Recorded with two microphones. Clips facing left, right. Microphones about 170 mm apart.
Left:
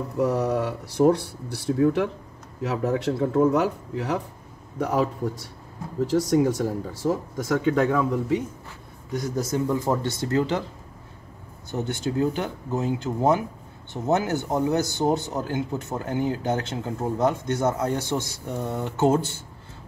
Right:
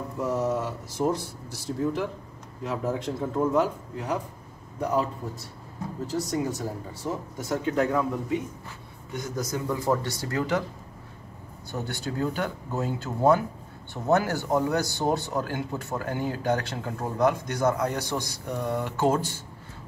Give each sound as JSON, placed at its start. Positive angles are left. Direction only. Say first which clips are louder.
{"t": 0.2, "sound": "a man's voice", "louder": "left 4 dB", "side_deg": 70}
{"t": 6.0, "sound": "speech", "louder": "left 8 dB", "side_deg": 90}
{"t": 9.1, "sound": "speech", "louder": "left 5 dB", "side_deg": 35}
{"t": 11.7, "sound": "speech", "louder": "left 5 dB", "side_deg": 20}